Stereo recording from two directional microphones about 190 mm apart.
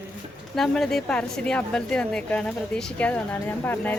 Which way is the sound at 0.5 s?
Centre (ahead or behind).